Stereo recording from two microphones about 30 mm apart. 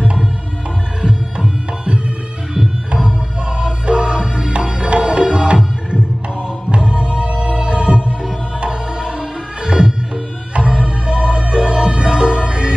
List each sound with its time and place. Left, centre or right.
1.0 s music: right
6.7 s music: right
8.5 s tabla: right
10.1 s music: right